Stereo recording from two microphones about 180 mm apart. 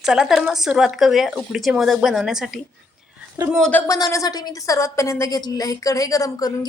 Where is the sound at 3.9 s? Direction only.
20° left (ahead or behind).